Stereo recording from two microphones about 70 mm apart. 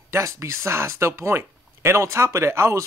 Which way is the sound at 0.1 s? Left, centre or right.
Right.